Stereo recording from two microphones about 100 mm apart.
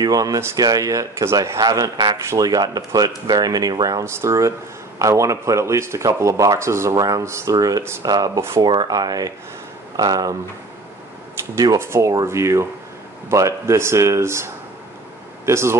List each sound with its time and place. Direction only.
0.0 s speech: 40° right (ahead or behind)
4.0 s speech: 30° right (ahead or behind)
8.4 s speech: 25° right (ahead or behind)
8.6 s speech: 40° right (ahead or behind)
11.5 s speech: 40° right (ahead or behind)
11.8 s speech: 25° right (ahead or behind)